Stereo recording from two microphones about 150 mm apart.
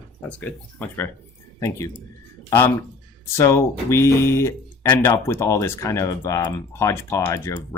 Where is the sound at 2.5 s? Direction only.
20° left (ahead or behind).